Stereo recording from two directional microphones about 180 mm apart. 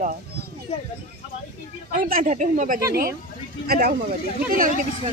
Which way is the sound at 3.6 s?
55° right (ahead or behind).